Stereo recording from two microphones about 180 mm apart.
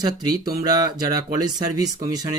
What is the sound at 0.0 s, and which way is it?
Speech, 20° right (ahead or behind).